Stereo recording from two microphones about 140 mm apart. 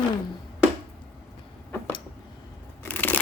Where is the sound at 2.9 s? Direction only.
15° left (ahead or behind).